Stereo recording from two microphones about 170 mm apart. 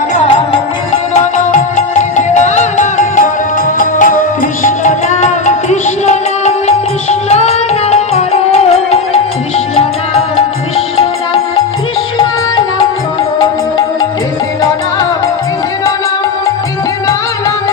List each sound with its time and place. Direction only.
1.2 s music: 45° left (ahead or behind)